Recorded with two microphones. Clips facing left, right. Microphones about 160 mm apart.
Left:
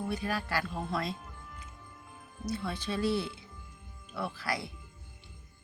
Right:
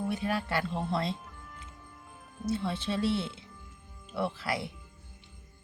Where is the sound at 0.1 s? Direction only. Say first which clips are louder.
Right 2 dB; 20° right (ahead or behind).